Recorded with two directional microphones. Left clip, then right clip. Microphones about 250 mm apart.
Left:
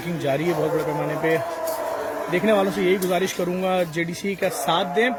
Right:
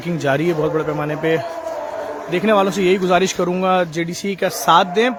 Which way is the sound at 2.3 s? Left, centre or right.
Centre.